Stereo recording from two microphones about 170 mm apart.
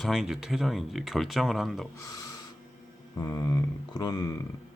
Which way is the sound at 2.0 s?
20° left (ahead or behind).